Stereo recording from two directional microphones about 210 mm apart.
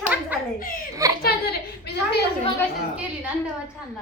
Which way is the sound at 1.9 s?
50° left (ahead or behind).